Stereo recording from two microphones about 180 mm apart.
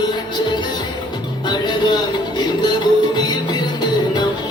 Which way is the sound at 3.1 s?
25° left (ahead or behind).